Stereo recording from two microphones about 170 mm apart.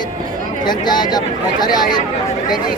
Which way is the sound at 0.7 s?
25° left (ahead or behind).